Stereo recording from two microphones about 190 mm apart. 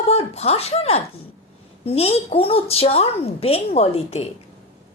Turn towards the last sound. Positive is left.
turn(degrees=30)  # may be behind; listen again after turning